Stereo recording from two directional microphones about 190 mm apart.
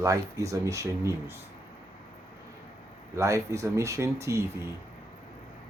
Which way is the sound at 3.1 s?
15° right (ahead or behind).